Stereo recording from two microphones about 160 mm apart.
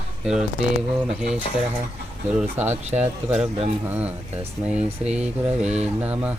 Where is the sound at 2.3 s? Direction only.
10° right (ahead or behind).